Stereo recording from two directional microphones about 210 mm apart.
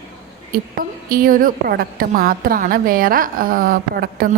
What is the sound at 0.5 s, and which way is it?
A woman's voice, 45° right (ahead or behind).